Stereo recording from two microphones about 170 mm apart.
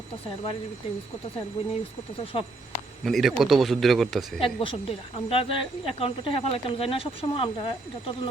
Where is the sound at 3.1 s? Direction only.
Centre (ahead or behind).